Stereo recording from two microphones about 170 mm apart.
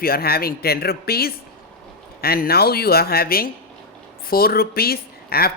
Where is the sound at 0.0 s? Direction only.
60° left (ahead or behind).